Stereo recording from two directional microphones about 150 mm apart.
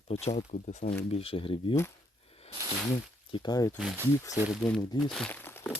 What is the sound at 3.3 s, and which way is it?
Speech, 30° left (ahead or behind).